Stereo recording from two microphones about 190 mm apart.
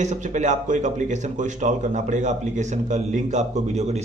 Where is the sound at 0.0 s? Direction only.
40° right (ahead or behind).